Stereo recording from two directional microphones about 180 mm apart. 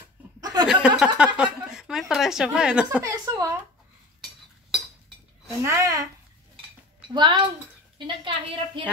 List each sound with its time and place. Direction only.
0.4 s chuckle: 20° right (ahead or behind)
0.7 s a woman's voice: 5° right (ahead or behind)
3.0 s a woman's voice: 20° right (ahead or behind)
5.6 s a woman's voice: 15° right (ahead or behind)
7.2 s a woman's voice: 25° right (ahead or behind)